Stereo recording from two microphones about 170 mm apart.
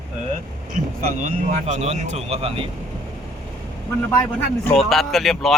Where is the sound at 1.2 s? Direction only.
45° right (ahead or behind).